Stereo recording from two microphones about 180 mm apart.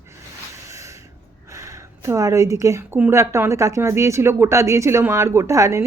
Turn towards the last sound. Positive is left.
turn(degrees=-15)  # may be behind; listen again after turning